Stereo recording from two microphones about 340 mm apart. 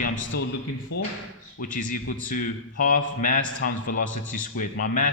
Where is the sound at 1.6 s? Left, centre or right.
Left.